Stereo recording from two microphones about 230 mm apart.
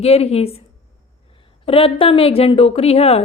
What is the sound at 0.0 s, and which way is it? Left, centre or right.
Speech, left.